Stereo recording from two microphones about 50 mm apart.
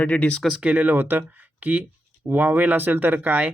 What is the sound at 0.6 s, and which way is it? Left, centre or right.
Speech, right.